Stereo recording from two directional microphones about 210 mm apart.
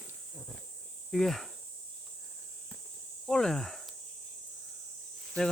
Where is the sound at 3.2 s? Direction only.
5° left (ahead or behind).